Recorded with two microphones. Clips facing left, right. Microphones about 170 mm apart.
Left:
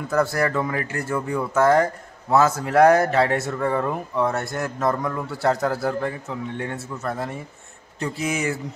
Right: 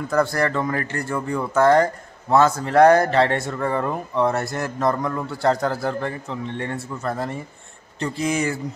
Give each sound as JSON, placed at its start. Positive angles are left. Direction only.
{"t": 0.1, "sound": "speech", "side_deg": 5}